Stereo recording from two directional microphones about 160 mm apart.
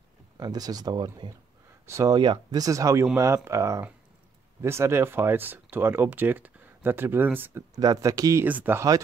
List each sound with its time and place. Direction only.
0.4 s speech: 25° right (ahead or behind)